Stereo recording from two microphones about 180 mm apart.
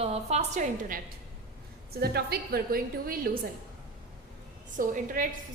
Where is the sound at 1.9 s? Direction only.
60° right (ahead or behind).